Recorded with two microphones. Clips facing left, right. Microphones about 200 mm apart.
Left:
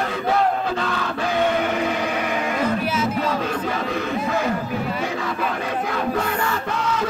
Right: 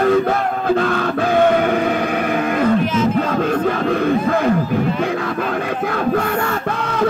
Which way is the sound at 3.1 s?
55° right (ahead or behind).